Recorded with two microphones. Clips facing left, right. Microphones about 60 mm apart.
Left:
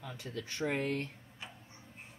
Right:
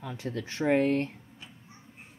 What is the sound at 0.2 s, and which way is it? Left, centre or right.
Speech, right.